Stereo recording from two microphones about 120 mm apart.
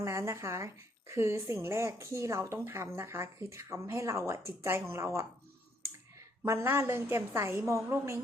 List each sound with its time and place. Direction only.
0.0 s a woman's voice: 25° right (ahead or behind)